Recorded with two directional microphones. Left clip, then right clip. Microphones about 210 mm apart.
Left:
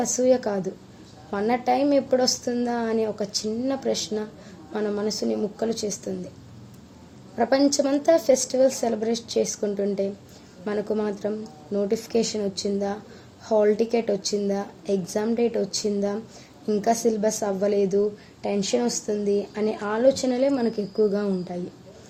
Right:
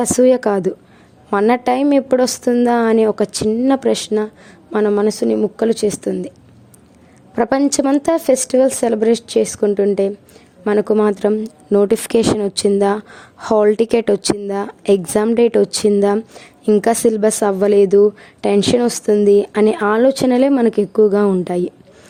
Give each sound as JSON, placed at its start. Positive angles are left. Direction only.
{"t": 0.0, "sound": "a woman's voice", "side_deg": -50}
{"t": 7.3, "sound": "a woman's voice", "side_deg": -50}